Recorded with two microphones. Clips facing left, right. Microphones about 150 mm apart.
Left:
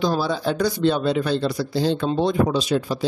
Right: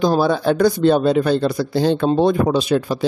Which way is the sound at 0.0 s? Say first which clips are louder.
Right 6 dB; 50° right (ahead or behind).